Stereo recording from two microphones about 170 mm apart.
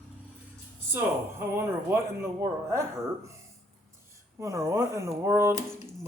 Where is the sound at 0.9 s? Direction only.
15° right (ahead or behind).